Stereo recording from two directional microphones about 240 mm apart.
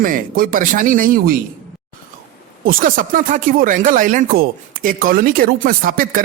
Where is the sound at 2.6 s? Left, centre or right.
Right.